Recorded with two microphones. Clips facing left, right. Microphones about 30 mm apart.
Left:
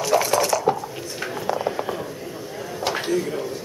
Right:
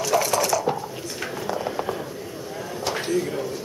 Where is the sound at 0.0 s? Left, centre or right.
Centre.